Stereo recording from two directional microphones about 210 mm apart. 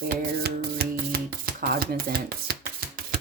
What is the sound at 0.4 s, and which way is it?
Music, 45° right (ahead or behind).